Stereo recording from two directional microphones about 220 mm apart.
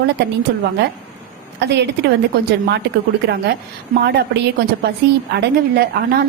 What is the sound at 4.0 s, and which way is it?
A woman's voice, 45° right (ahead or behind).